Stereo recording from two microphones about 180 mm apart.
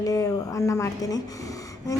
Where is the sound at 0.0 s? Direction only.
20° left (ahead or behind).